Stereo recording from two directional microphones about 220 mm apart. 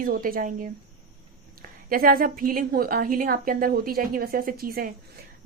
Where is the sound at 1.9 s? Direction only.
40° right (ahead or behind).